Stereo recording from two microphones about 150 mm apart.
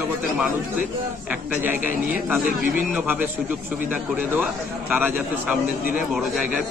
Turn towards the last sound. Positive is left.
turn(degrees=-10)  # may be behind; listen again after turning